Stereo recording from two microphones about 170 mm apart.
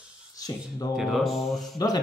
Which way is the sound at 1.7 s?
20° left (ahead or behind).